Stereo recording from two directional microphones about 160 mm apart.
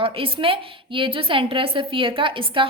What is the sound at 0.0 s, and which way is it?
A woman's voice, 35° right (ahead or behind).